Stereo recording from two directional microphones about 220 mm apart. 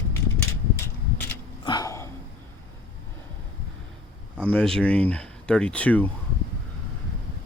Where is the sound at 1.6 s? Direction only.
15° left (ahead or behind).